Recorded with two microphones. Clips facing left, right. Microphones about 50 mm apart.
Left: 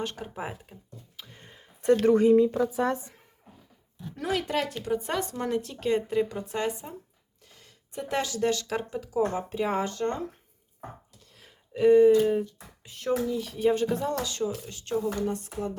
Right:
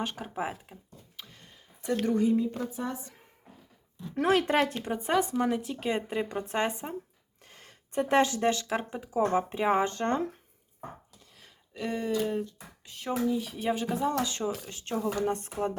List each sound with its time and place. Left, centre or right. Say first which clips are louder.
0.0 s speech: right 1 dB; centre
1.4 s a sound: left 3 dB; left
2.0 s speech: left 6 dB; left
4.1 s speech: right 4 dB; right
5.1 s speech: right 2 dB; centre
6.5 s speech: right 1 dB; right
7.4 s speech: right 3 dB; right
11.7 s speech: left 13 dB; centre
13.0 s speech: left 2 dB; centre
14.2 s speech: even; right
14.9 s speech: left 1 dB; right